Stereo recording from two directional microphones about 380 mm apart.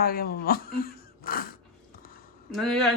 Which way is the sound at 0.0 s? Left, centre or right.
Left.